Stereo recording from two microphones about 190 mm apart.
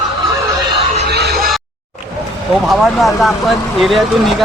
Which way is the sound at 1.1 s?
60° right (ahead or behind).